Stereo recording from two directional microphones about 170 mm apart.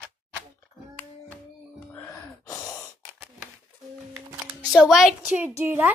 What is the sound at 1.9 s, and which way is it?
Gasp, 20° left (ahead or behind).